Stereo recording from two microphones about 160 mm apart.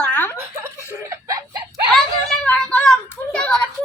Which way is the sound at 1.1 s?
20° right (ahead or behind).